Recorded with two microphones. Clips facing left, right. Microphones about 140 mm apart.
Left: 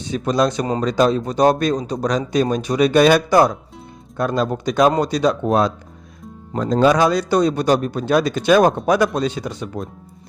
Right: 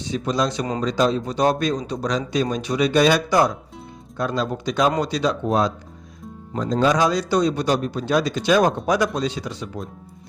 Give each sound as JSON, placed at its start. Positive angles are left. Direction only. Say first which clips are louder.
{"t": 0.0, "sound": "speech", "louder": "left 4 dB", "side_deg": 50}